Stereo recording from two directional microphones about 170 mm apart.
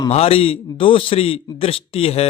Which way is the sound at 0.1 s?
35° left (ahead or behind).